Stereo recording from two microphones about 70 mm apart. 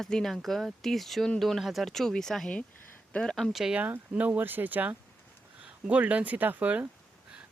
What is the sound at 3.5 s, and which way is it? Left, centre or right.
Speech, centre.